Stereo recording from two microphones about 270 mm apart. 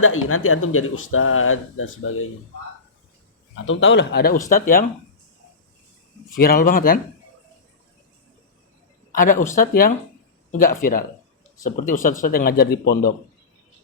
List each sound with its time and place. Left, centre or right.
0.0 s speech: left
3.5 s a man's voice: left
6.4 s a man's voice: left
9.1 s a man's voice: left